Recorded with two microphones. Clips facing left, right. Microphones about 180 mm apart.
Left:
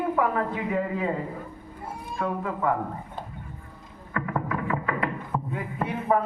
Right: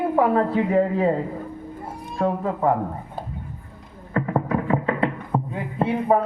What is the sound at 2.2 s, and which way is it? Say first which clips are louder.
Speech: right 6 dB; 35° right (ahead or behind).